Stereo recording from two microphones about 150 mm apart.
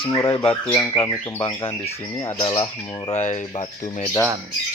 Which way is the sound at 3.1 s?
50° left (ahead or behind).